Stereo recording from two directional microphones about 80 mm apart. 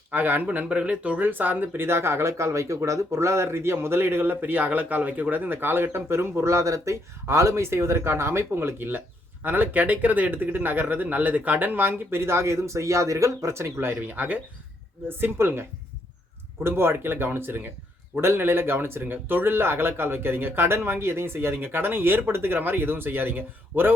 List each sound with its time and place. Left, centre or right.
0.1 s speech: right
16.6 s speech: right